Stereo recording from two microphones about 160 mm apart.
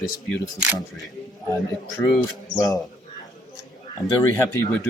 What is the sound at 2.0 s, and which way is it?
Speech, 15° left (ahead or behind).